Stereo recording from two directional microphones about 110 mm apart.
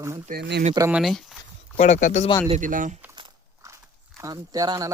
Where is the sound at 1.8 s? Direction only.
85° left.